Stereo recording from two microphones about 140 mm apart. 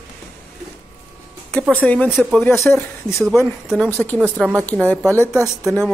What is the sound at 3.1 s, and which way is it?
Speech, 5° left (ahead or behind).